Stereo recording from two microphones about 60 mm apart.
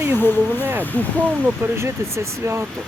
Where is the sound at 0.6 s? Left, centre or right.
Right.